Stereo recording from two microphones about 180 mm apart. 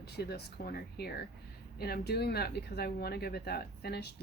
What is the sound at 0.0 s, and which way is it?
Speech, 60° left (ahead or behind).